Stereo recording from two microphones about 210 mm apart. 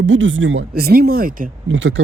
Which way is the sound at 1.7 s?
60° right (ahead or behind).